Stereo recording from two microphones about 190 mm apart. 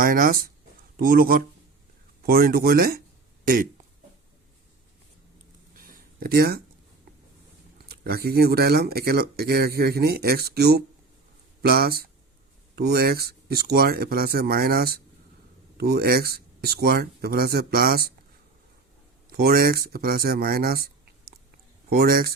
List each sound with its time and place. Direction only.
0.0 s speech: 50° right (ahead or behind)
5.7 s a sound: 45° right (ahead or behind)
7.9 s speech: 50° right (ahead or behind)
19.3 s speech: 55° right (ahead or behind)
21.8 s speech: 50° right (ahead or behind)